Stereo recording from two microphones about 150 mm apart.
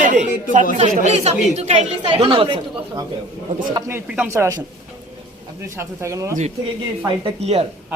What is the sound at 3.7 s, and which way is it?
Speech, 20° right (ahead or behind).